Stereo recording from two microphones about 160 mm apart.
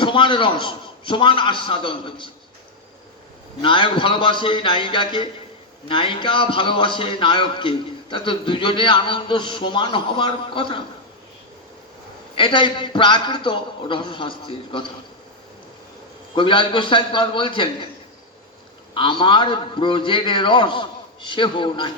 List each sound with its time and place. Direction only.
0.0 s a man's voice: 30° left (ahead or behind)
3.6 s a man's voice: 30° left (ahead or behind)
12.4 s a man's voice: 30° left (ahead or behind)
16.3 s a man's voice: 30° left (ahead or behind)
18.9 s a man's voice: 30° left (ahead or behind)